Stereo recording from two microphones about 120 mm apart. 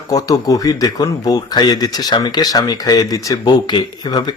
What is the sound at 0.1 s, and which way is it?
Speech, 30° left (ahead or behind).